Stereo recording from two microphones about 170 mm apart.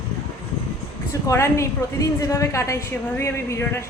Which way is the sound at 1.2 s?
15° left (ahead or behind).